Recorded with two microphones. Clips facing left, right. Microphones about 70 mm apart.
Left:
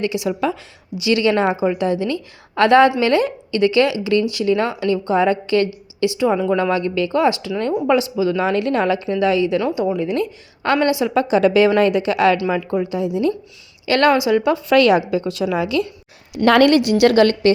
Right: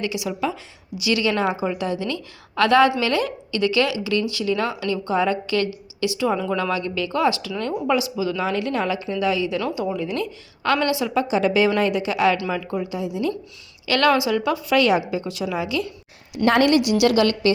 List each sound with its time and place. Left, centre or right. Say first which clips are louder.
0.0 s a woman's voice: left 5 dB; left
9.6 s a woman's voice: left 5 dB; left
11.1 s a woman's voice: left 5 dB; left
13.8 s speech: left 4 dB; left
14.7 s a woman's voice: left 5 dB; left
16.4 s a woman's voice: left 4 dB; left